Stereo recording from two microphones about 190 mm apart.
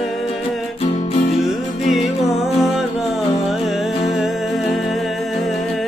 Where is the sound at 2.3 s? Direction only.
Centre (ahead or behind).